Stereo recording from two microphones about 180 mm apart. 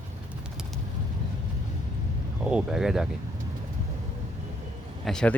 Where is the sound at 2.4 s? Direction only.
5° right (ahead or behind).